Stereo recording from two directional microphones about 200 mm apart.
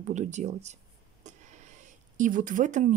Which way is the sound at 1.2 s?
35° right (ahead or behind).